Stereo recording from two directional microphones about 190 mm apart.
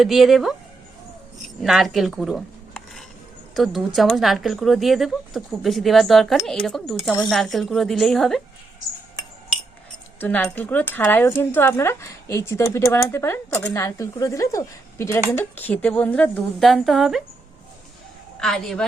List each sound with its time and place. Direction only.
0.0 s speech: centre (ahead or behind)
1.6 s speech: centre (ahead or behind)
10.2 s speech: 10° left (ahead or behind)
18.3 s speech: centre (ahead or behind)